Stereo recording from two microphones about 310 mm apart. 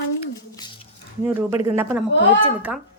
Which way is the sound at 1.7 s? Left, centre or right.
Centre.